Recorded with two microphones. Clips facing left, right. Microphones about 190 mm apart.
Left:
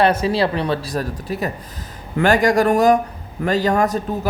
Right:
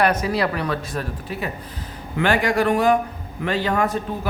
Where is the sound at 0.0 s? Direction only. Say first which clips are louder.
Left 3 dB; 30° left (ahead or behind).